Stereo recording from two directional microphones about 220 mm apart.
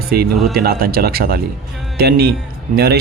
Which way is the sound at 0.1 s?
45° right (ahead or behind).